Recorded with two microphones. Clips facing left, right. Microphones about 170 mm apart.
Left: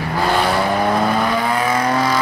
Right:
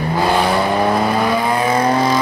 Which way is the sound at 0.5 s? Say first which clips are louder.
Right 2 dB; centre (ahead or behind).